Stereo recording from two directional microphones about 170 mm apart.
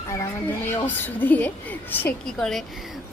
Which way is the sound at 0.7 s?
10° left (ahead or behind).